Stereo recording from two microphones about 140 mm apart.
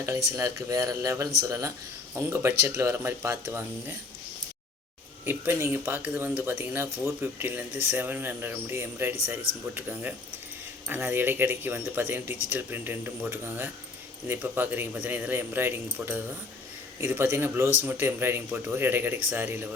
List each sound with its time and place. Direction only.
0.3 s speech: 20° right (ahead or behind)
5.2 s speech: 15° right (ahead or behind)